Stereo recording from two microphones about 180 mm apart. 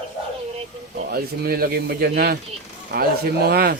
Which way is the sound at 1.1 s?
55° right (ahead or behind).